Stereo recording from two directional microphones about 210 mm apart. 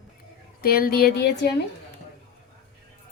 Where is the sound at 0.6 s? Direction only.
45° left (ahead or behind).